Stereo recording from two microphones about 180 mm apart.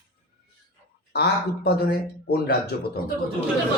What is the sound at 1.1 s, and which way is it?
Speech, 60° left (ahead or behind).